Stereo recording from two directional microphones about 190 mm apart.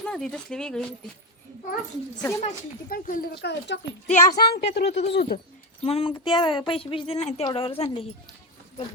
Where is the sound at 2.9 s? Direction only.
50° left (ahead or behind).